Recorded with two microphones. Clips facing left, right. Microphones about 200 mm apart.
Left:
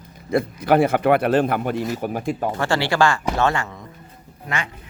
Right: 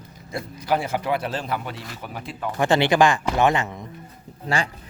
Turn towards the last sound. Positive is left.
turn(degrees=-30)  # may be behind; listen again after turning